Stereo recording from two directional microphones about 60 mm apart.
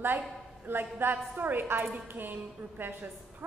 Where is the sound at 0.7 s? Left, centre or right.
Right.